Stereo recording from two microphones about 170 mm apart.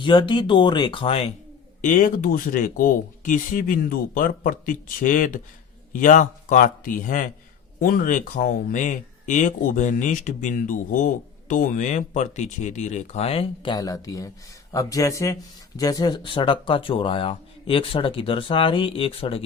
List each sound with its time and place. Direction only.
0.0 s speech: 30° left (ahead or behind)
1.8 s speech: 50° left (ahead or behind); by 19.5 s 35° left (ahead or behind)